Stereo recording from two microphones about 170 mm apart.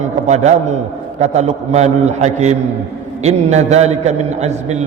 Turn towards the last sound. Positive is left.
turn(degrees=-40)  # may be behind; listen again after turning